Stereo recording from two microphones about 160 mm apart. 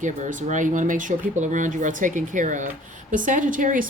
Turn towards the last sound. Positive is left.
turn(degrees=-55)  # may be behind; listen again after turning